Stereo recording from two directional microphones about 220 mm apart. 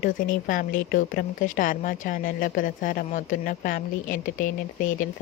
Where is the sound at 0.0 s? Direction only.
40° left (ahead or behind).